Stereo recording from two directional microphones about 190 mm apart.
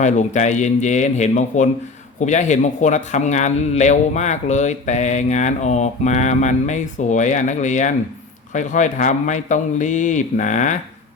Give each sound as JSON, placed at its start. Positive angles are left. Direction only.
{"t": 0.0, "sound": "a man's voice", "side_deg": 40}